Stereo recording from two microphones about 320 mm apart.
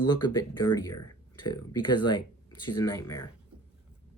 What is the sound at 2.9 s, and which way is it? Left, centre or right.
Speech, centre.